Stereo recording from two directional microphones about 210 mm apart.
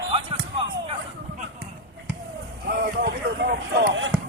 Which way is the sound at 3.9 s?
65° right (ahead or behind).